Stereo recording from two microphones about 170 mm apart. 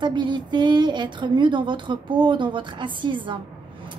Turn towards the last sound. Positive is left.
turn(degrees=-30)  # may be behind; listen again after turning